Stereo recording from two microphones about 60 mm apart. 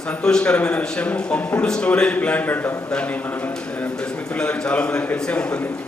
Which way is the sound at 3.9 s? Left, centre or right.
Centre.